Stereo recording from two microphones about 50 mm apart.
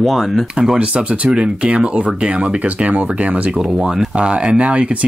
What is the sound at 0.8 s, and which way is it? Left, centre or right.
Speech, right.